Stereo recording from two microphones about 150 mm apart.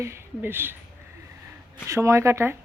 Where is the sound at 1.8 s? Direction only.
20° right (ahead or behind).